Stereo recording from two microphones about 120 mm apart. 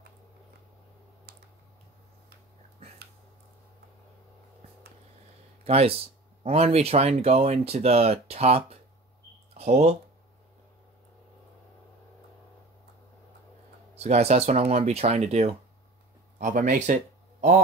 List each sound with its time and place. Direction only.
5.6 s speech: 55° right (ahead or behind)
13.9 s speech: 65° right (ahead or behind)
16.3 s speech: 90° right